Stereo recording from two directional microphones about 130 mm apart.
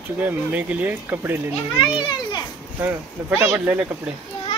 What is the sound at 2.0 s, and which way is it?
Children playing, 40° left (ahead or behind).